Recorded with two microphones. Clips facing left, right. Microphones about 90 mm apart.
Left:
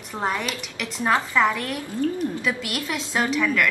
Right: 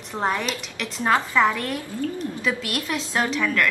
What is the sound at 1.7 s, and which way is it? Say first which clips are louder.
Speech: left 1 dB; 20° left (ahead or behind).